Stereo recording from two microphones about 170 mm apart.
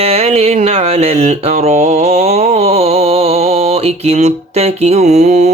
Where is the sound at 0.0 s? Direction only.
35° right (ahead or behind).